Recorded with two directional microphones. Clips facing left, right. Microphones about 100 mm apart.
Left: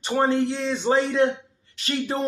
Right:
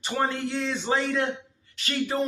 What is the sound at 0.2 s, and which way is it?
Speech, 25° left (ahead or behind).